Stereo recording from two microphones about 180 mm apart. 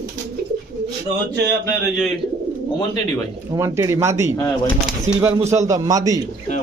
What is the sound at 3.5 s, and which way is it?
Speech, 15° right (ahead or behind).